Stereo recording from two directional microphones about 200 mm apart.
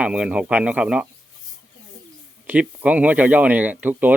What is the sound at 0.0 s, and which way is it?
Speech, 5° right (ahead or behind).